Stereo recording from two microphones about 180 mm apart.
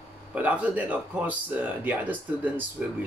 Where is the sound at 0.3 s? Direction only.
10° right (ahead or behind).